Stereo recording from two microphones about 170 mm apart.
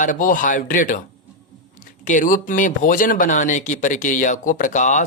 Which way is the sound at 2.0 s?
50° left (ahead or behind).